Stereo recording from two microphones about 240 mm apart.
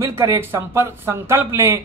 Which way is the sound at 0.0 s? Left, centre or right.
Centre.